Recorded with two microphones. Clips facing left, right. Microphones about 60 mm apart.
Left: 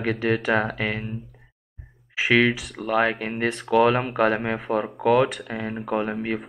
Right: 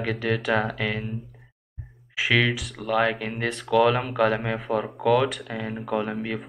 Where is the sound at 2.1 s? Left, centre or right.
Left.